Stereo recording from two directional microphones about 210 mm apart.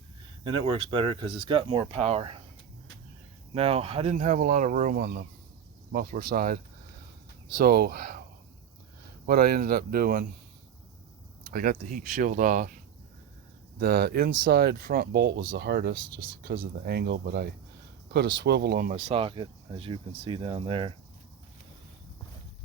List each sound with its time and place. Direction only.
0.4 s speech: 25° right (ahead or behind)
3.5 s speech: 25° right (ahead or behind); by 6.6 s 45° right (ahead or behind)
7.6 s speech: 45° right (ahead or behind)
9.2 s speech: 45° right (ahead or behind)
11.5 s speech: 40° right (ahead or behind)
18.9 s speech: 35° right (ahead or behind)